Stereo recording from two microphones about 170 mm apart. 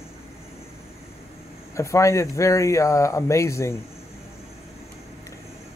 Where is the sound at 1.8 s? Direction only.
15° left (ahead or behind).